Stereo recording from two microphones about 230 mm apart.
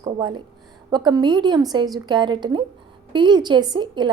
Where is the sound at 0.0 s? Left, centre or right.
Centre.